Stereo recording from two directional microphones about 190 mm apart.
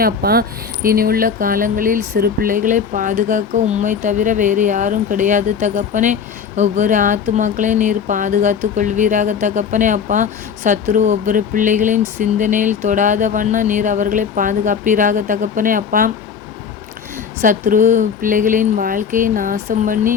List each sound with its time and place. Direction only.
0.0 s speech: 55° right (ahead or behind)
17.4 s speech: 45° right (ahead or behind)